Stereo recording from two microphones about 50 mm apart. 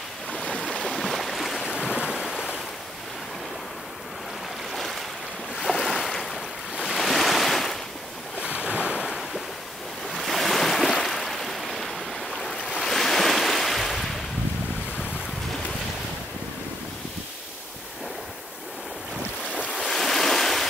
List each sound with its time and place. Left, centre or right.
0.3 s boat: centre
1.6 s boat: centre
4.7 s waves: centre
5.6 s boat: centre
6.9 s waves: centre
8.6 s waves: right
10.1 s waves: centre
19.7 s waves: centre